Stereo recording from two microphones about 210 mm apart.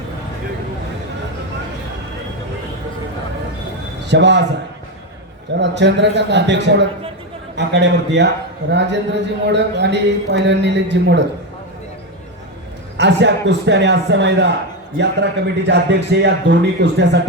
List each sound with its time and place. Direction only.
4.1 s a man's voice: 55° right (ahead or behind)
5.5 s a man's voice: 55° right (ahead or behind)
13.0 s a man's voice: 55° right (ahead or behind)